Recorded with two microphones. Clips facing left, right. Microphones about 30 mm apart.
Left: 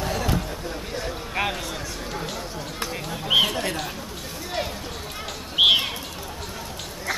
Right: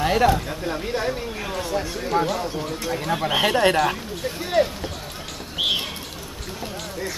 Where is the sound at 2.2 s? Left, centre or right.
Centre.